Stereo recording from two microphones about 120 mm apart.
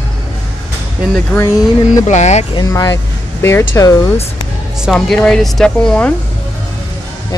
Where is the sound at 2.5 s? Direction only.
30° left (ahead or behind).